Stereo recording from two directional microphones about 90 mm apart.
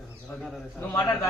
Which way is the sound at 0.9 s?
40° left (ahead or behind).